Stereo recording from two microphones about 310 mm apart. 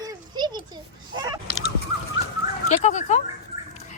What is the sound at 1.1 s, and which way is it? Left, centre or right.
Goose, centre.